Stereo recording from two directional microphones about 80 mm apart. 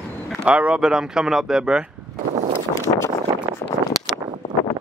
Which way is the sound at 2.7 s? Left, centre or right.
Left.